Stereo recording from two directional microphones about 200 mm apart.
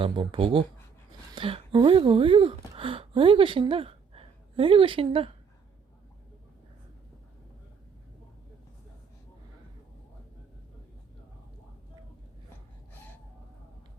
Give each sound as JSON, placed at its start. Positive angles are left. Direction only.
{"t": 0.0, "sound": "speech", "side_deg": -25}